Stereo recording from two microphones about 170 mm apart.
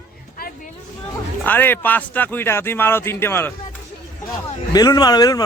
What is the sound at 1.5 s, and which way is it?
Speech, 10° left (ahead or behind).